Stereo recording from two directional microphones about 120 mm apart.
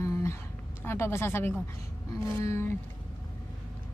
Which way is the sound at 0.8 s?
20° left (ahead or behind).